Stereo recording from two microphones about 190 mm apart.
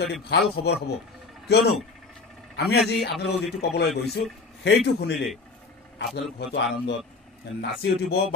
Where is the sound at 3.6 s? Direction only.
60° left (ahead or behind).